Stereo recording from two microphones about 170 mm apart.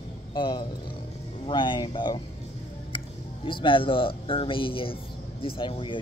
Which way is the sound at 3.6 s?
30° left (ahead or behind).